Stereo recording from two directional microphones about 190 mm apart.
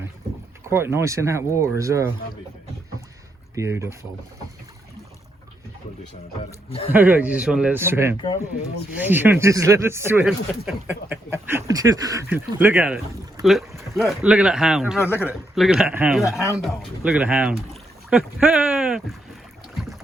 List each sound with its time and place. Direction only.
0.7 s speech: 15° right (ahead or behind)
3.5 s speech: 15° right (ahead or behind)
6.7 s speech: 30° left (ahead or behind)
6.9 s speech: 10° right (ahead or behind)
14.9 s a man's voice: 10° left (ahead or behind)
15.3 s speech: centre (ahead or behind)